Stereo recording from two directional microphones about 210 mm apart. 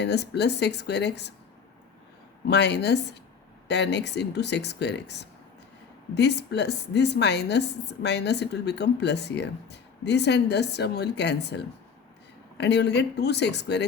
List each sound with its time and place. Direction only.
0.0 s a woman's voice: 55° left (ahead or behind)
2.5 s a woman's voice: 55° left (ahead or behind)